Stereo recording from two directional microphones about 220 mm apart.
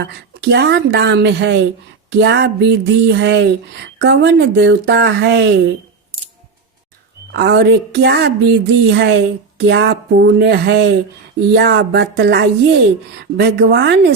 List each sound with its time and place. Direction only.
0.4 s a woman's voice: 50° right (ahead or behind)
7.3 s a woman's voice: 50° right (ahead or behind)